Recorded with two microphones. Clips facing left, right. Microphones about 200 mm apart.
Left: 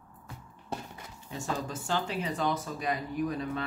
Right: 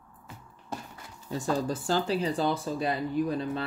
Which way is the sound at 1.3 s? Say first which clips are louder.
Right 6 dB; 35° right (ahead or behind).